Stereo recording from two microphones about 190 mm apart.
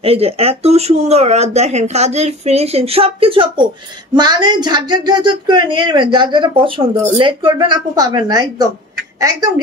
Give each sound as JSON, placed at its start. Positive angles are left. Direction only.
{"t": 0.0, "sound": "speech", "side_deg": -30}